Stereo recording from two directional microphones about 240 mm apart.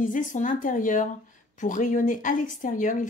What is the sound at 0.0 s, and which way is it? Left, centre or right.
A woman's voice, left.